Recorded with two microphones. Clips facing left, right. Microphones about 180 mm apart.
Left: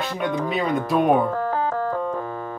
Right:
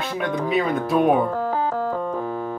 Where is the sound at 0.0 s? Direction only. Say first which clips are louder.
Even; centre (ahead or behind).